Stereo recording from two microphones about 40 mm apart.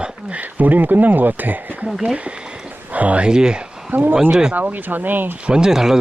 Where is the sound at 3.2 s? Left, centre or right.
Right.